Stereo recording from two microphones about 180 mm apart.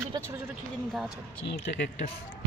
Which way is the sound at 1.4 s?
65° left (ahead or behind).